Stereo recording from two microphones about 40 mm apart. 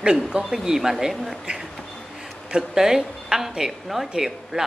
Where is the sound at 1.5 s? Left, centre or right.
Right.